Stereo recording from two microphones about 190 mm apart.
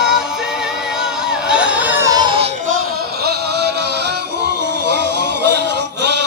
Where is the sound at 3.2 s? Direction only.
55° right (ahead or behind).